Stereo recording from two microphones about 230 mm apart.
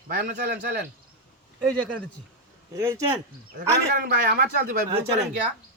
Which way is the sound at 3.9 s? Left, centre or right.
Right.